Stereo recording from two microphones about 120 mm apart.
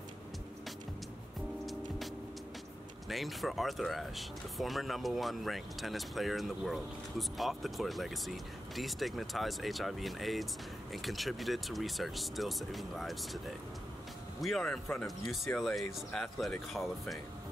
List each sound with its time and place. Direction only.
3.1 s speech: centre (ahead or behind)